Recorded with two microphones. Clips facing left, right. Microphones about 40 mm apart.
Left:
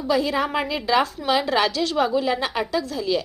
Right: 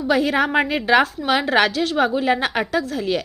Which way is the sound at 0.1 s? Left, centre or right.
Right.